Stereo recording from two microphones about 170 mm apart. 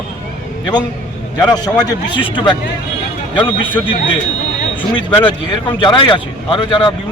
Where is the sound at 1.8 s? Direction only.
25° left (ahead or behind).